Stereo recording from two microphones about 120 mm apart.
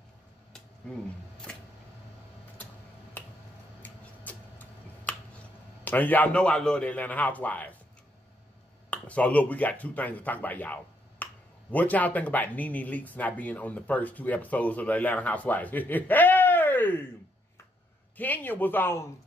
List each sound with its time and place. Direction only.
3.2 s finger snapping: 15° left (ahead or behind)
3.8 s tick-tock: 15° left (ahead or behind)
5.9 s speech: 15° left (ahead or behind)
8.9 s speech: 10° left (ahead or behind)
18.1 s speech: 15° left (ahead or behind)